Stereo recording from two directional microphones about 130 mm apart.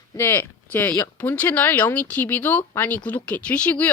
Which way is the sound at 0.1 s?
15° left (ahead or behind).